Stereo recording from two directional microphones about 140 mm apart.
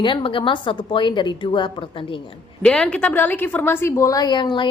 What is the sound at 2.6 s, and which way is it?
A woman's voice, 5° left (ahead or behind).